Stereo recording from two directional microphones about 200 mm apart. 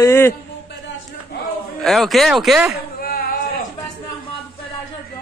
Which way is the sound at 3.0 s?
50° left (ahead or behind).